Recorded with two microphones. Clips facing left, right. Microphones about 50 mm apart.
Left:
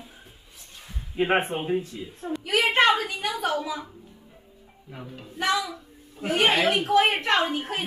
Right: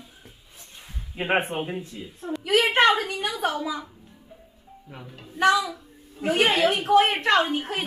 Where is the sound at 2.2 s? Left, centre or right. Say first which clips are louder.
Even; left.